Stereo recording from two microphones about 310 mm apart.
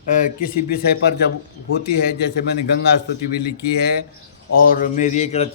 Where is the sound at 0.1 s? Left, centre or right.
Left.